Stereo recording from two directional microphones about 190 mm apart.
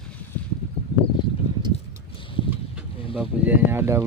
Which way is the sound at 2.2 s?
25° left (ahead or behind).